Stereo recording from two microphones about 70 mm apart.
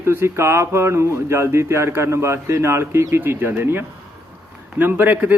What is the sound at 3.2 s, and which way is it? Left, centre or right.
A man's voice, right.